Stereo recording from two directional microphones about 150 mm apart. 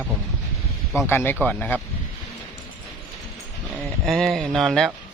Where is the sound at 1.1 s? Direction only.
15° left (ahead or behind).